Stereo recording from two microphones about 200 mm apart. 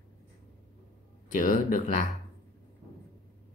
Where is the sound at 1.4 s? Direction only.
40° left (ahead or behind).